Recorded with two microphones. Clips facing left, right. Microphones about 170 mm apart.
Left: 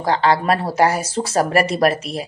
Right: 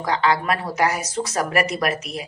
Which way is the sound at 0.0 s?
30° left (ahead or behind).